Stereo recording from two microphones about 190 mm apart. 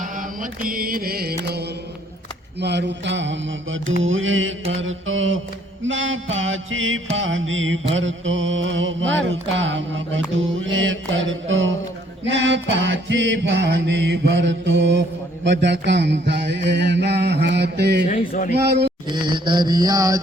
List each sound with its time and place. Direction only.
0.0 s mantra: 45° right (ahead or behind); by 4.5 s 90° right
4.7 s music: 90° right
7.9 s mantra: 85° right
12.3 s music: 70° right (ahead or behind)
15.4 s mantra: 65° right (ahead or behind)
18.1 s speech: 40° left (ahead or behind)
18.5 s mantra: 60° right (ahead or behind)
19.1 s mantra: 25° right (ahead or behind)